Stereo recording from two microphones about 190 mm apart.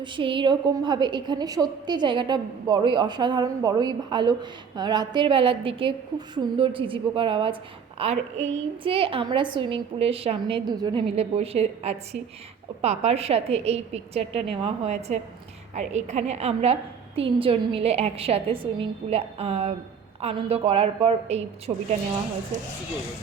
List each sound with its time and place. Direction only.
0.0 s a woman's voice: 25° right (ahead or behind)
11.1 s a woman's voice: 30° right (ahead or behind)